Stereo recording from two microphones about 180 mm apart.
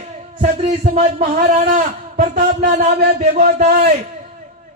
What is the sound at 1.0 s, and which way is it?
A man's voice, 45° right (ahead or behind).